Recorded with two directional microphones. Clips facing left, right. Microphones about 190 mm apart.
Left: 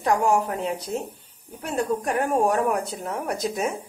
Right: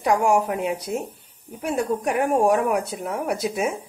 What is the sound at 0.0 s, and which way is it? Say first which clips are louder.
A woman's voice: right 2 dB; 10° right (ahead or behind).